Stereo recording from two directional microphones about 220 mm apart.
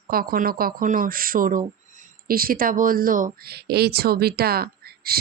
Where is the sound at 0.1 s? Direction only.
40° right (ahead or behind).